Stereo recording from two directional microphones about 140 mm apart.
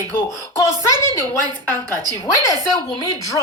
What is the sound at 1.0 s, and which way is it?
A woman's voice, 20° left (ahead or behind).